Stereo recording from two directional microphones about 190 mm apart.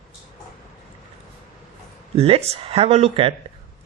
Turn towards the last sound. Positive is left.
turn(degrees=-30)  # may be behind; listen again after turning